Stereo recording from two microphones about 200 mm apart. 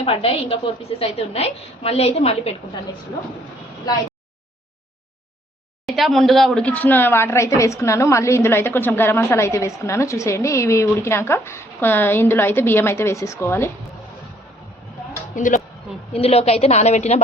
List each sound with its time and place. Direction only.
0.0 s a woman's voice: 30° left (ahead or behind)
5.8 s speech: centre (ahead or behind)
15.4 s a woman's voice: 40° left (ahead or behind)
16.1 s a woman's voice: 30° left (ahead or behind)